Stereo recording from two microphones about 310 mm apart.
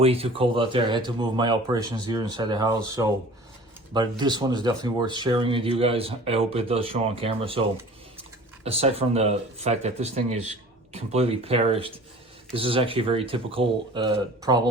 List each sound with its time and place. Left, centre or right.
0.0 s speech: centre